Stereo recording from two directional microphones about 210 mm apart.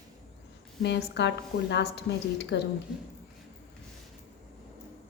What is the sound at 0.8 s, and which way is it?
Speech, 55° left (ahead or behind).